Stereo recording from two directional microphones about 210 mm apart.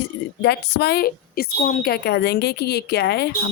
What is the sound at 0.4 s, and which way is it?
A woman's voice, 50° left (ahead or behind).